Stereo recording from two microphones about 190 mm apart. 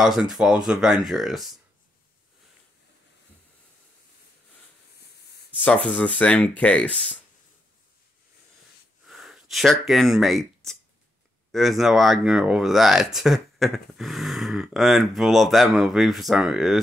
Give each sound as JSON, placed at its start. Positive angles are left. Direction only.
{"t": 0.0, "sound": "speech", "side_deg": 0}
{"t": 5.6, "sound": "speech", "side_deg": 10}
{"t": 9.0, "sound": "a sound", "side_deg": 0}
{"t": 11.5, "sound": "speech", "side_deg": 0}